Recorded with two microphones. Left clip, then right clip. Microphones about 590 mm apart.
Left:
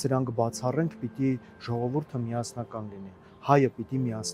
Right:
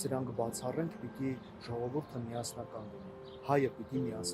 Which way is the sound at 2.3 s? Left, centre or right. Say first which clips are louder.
Left 7 dB; left.